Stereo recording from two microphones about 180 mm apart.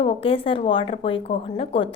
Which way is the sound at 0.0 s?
30° left (ahead or behind).